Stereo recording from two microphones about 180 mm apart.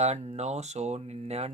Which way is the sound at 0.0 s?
40° right (ahead or behind).